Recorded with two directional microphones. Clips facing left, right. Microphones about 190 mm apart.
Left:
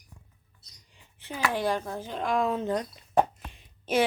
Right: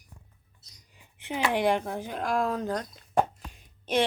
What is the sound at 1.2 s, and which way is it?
Speech, 20° right (ahead or behind).